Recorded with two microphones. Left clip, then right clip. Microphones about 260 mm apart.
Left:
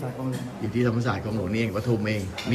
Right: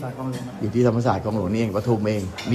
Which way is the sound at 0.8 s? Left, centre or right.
Centre.